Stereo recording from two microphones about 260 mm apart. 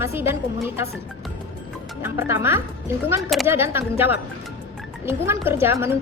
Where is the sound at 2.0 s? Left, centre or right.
Centre.